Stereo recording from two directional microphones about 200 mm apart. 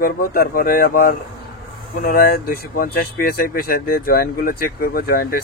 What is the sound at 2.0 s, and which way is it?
Speech, 50° left (ahead or behind).